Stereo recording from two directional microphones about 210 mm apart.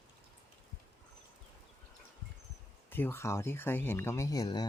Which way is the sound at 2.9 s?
10° left (ahead or behind).